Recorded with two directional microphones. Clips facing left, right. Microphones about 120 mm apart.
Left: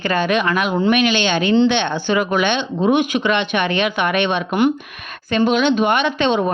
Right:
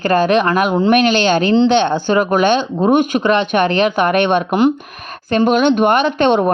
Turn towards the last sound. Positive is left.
turn(degrees=-55)  # may be behind; listen again after turning